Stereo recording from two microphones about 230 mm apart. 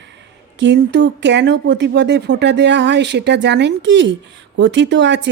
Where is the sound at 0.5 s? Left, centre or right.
Right.